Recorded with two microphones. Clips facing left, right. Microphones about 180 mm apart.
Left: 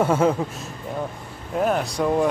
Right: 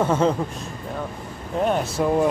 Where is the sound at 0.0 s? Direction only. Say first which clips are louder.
Left 1 dB; 10° left (ahead or behind).